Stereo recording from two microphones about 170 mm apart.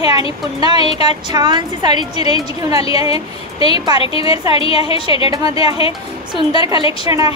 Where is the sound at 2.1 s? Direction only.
35° left (ahead or behind).